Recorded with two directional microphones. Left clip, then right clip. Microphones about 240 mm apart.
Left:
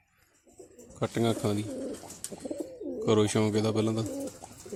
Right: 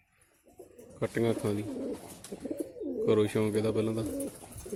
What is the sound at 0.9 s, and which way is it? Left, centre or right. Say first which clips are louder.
Speech: left 1 dB; left.